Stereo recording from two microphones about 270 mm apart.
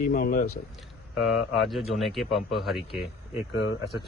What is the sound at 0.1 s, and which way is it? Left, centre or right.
Speech, left.